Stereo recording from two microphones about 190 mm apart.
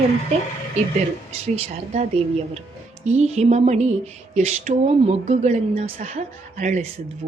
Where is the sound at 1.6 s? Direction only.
35° right (ahead or behind).